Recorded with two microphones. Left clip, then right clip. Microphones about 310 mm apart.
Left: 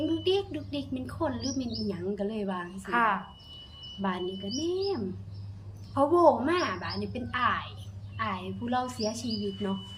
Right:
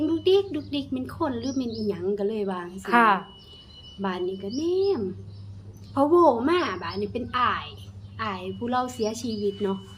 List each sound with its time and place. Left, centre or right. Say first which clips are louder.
0.2 s a sound: right 7 dB; centre
1.5 s a woman's voice: right 5 dB; centre
2.8 s speech: right 7 dB; right
4.0 s a woman's voice: right 4 dB; centre